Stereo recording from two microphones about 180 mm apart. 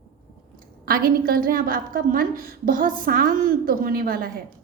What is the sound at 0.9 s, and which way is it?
A woman's voice, 55° right (ahead or behind).